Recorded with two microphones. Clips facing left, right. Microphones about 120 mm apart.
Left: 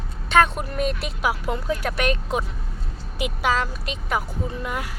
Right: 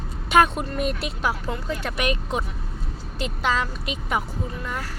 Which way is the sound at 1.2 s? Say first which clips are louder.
Left 3 dB; 10° left (ahead or behind).